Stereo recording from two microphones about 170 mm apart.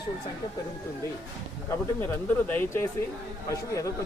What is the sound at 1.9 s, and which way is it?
Speech, 10° left (ahead or behind).